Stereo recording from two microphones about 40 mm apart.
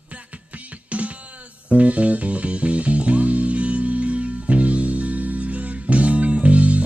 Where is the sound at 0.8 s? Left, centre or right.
Right.